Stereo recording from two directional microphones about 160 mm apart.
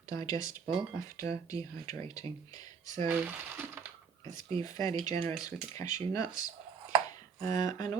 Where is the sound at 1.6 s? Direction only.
20° left (ahead or behind).